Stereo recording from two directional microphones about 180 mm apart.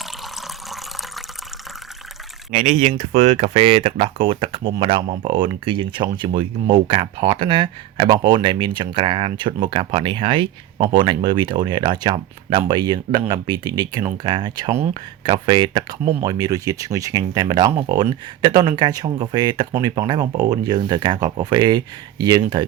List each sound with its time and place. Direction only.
0.0 s water: centre (ahead or behind)
2.5 s speech: 45° right (ahead or behind); by 22.6 s 25° right (ahead or behind)